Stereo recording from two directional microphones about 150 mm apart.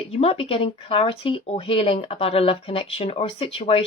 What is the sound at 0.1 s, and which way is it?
Speech, 40° left (ahead or behind).